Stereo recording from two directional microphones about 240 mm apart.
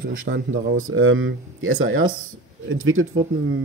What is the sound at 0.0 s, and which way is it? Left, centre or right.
Speech, right.